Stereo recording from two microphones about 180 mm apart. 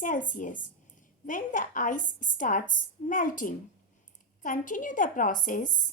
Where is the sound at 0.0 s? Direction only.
45° left (ahead or behind).